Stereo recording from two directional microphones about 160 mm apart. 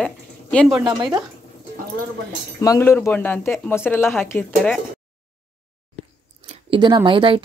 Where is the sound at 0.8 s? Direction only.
25° right (ahead or behind).